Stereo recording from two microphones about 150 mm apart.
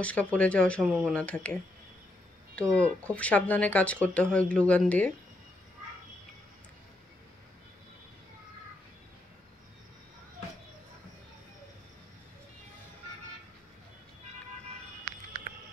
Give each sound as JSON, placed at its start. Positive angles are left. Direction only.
{"t": 0.0, "sound": "speech", "side_deg": 10}